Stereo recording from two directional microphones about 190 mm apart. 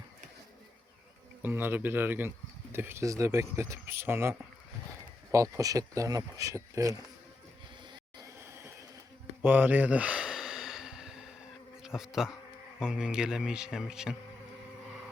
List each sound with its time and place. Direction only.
1.4 s speech: 10° right (ahead or behind)
8.2 s a sound: 15° right (ahead or behind)
11.8 s speech: 5° right (ahead or behind)